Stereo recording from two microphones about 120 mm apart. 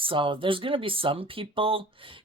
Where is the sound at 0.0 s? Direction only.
45° right (ahead or behind).